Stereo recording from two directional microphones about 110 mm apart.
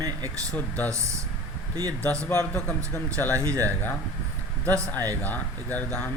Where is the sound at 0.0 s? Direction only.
35° right (ahead or behind).